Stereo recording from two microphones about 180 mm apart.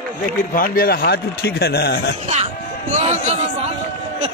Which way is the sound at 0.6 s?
55° left (ahead or behind).